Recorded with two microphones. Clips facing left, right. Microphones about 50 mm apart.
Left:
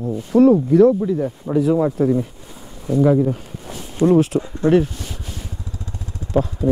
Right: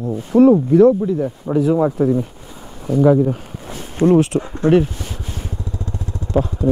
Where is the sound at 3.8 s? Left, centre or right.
Right.